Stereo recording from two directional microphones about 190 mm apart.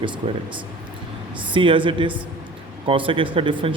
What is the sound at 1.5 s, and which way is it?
Speech, 25° right (ahead or behind).